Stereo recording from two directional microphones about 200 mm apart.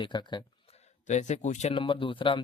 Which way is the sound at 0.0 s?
20° left (ahead or behind).